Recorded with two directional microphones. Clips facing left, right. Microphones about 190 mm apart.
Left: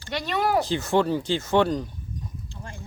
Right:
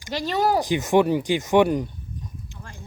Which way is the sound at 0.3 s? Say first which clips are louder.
Right 2 dB; 30° right (ahead or behind).